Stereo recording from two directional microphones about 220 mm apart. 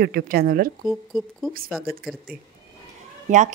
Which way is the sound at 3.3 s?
35° right (ahead or behind).